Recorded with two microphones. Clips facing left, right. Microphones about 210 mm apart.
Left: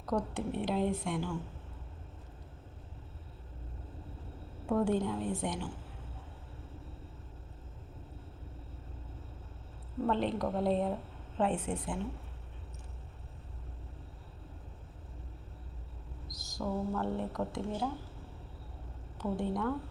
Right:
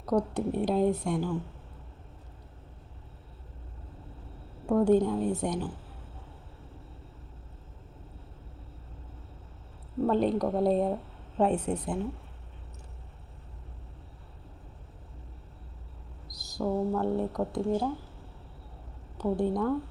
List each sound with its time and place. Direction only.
0.0 s a woman's voice: 35° right (ahead or behind)
4.6 s a woman's voice: 40° right (ahead or behind)
10.1 s a woman's voice: 40° right (ahead or behind)
16.3 s speech: 35° right (ahead or behind)
19.1 s a woman's voice: 35° right (ahead or behind)